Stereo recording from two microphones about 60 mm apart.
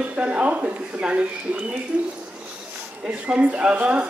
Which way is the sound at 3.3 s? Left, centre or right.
Centre.